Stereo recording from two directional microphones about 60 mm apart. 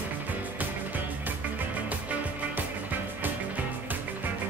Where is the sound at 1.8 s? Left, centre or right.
Right.